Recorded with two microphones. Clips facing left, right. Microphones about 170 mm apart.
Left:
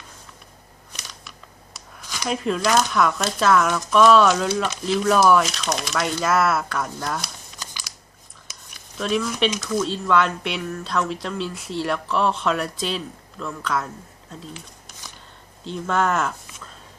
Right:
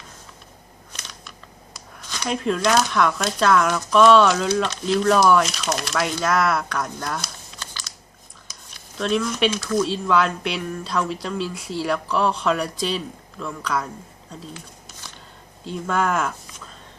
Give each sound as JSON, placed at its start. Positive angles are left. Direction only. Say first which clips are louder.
{"t": 1.7, "sound": "speech", "louder": "even", "side_deg": 5}
{"t": 7.6, "sound": "crunch", "louder": "even", "side_deg": 15}
{"t": 9.0, "sound": "speech", "louder": "right 1 dB", "side_deg": 0}
{"t": 15.6, "sound": "speech", "louder": "left 1 dB", "side_deg": -5}